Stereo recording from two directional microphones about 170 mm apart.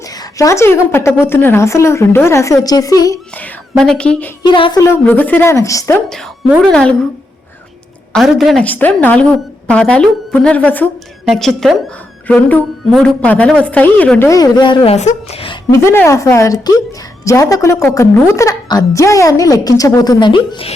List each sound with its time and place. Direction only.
0.0 s a woman's voice: 20° left (ahead or behind)
3.3 s a woman's voice: 5° left (ahead or behind)
4.4 s a woman's voice: 30° left (ahead or behind)
4.8 s a woman's voice: 15° left (ahead or behind)
6.1 s a woman's voice: 5° left (ahead or behind)
8.1 s a woman's voice: centre (ahead or behind); by 14.9 s 30° left (ahead or behind)
14.9 s a woman's voice: 40° left (ahead or behind)
15.7 s a woman's voice: 15° left (ahead or behind); by 20.7 s 30° left (ahead or behind)